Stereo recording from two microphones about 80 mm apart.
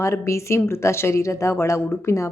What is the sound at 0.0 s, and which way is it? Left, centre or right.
Speech, left.